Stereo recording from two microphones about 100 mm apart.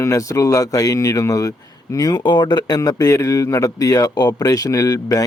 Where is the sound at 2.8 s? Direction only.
35° left (ahead or behind).